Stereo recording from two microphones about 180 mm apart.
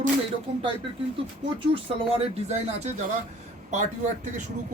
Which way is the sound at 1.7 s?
35° right (ahead or behind).